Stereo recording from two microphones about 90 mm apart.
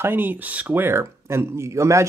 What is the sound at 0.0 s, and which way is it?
Speech, 25° right (ahead or behind).